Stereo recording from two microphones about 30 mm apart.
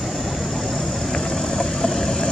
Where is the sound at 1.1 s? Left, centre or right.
Left.